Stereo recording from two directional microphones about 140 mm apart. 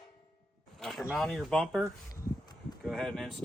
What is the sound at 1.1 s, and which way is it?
Speech, centre (ahead or behind).